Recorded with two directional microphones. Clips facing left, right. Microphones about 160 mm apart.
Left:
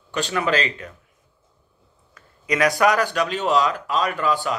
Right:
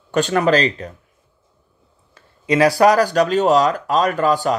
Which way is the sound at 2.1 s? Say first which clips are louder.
Right 6 dB; 30° right (ahead or behind).